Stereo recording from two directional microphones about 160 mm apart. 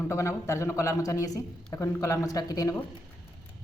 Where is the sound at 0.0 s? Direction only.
20° left (ahead or behind).